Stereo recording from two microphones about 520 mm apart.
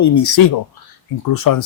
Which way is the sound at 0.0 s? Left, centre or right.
Left.